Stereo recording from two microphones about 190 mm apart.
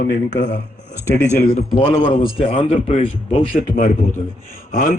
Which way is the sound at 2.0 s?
45° left (ahead or behind).